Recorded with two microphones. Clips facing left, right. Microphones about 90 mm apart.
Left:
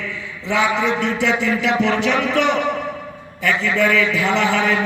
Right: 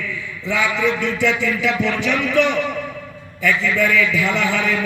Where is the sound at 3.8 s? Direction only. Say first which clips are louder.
Left 1 dB; 35° left (ahead or behind).